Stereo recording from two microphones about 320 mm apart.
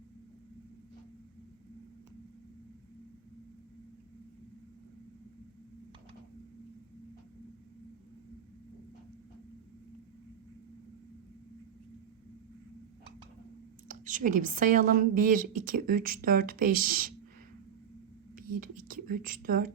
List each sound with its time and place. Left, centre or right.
13.8 s a woman's voice: right
18.3 s whispering: right
18.8 s speech: right